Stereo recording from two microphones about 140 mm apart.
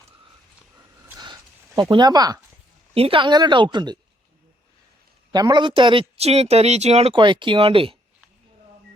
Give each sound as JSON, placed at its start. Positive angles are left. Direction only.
{"t": 1.2, "sound": "a sound", "side_deg": -30}
{"t": 2.9, "sound": "speech", "side_deg": -40}
{"t": 5.3, "sound": "speech", "side_deg": -30}
{"t": 7.1, "sound": "speech", "side_deg": -35}